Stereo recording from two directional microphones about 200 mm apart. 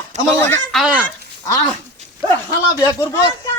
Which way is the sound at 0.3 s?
10° left (ahead or behind).